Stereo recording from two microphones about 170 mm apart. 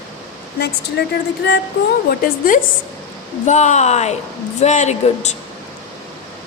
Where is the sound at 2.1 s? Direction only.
55° left (ahead or behind).